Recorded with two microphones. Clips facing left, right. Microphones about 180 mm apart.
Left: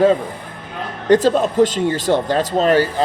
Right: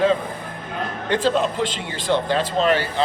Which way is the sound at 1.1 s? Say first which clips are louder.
Left 7 dB; 45° left (ahead or behind).